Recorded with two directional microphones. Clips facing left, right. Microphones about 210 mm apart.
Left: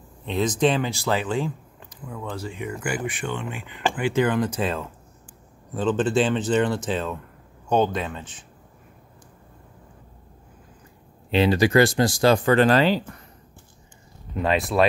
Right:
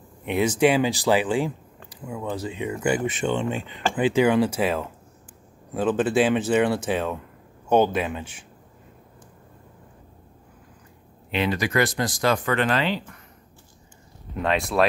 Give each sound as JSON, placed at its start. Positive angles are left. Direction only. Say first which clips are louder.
{"t": 0.2, "sound": "speech", "louder": "right 2 dB", "side_deg": -10}
{"t": 11.2, "sound": "speech", "louder": "left 6 dB", "side_deg": 30}
{"t": 14.4, "sound": "speech", "louder": "left 1 dB", "side_deg": 0}